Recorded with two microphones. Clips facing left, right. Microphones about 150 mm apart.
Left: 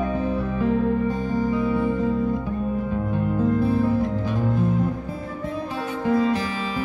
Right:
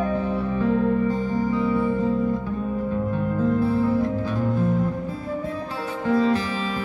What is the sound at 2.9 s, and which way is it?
Music, 15° left (ahead or behind).